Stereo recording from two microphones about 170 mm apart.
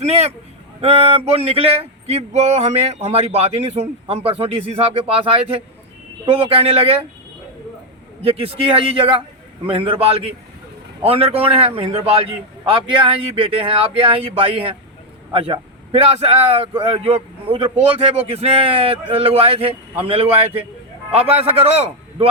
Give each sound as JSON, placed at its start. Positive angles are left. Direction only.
{"t": 0.0, "sound": "a man's voice", "side_deg": -40}
{"t": 8.2, "sound": "a man's voice", "side_deg": -35}